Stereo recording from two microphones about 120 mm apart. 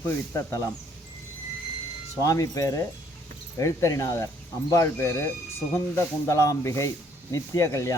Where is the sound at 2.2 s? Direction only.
30° left (ahead or behind).